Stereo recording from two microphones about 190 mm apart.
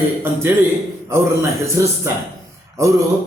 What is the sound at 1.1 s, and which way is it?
Speech, 15° right (ahead or behind).